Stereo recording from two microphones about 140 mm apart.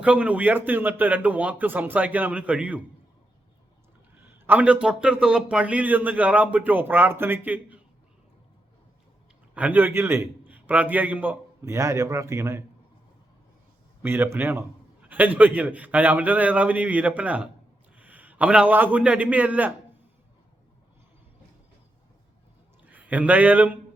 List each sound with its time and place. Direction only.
0.0 s a man's voice: 10° right (ahead or behind)
4.2 s a man's voice: 15° right (ahead or behind)
9.6 s a man's voice: 10° right (ahead or behind)
14.0 s a man's voice: 15° right (ahead or behind)
22.9 s speech: 10° right (ahead or behind)